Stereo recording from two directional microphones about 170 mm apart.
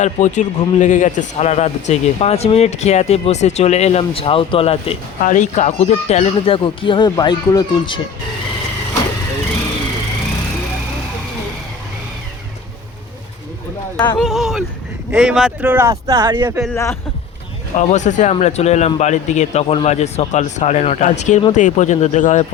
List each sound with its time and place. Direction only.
0.0 s speech: 45° left (ahead or behind); by 8.0 s 25° left (ahead or behind)
13.9 s speech: 20° left (ahead or behind)
14.2 s speech: centre (ahead or behind); by 16.6 s 20° right (ahead or behind)
16.7 s a man's voice: 15° left (ahead or behind)
17.7 s speech: 45° left (ahead or behind)